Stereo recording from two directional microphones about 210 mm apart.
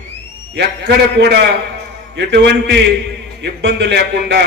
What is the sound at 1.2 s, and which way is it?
A man's voice, 50° right (ahead or behind).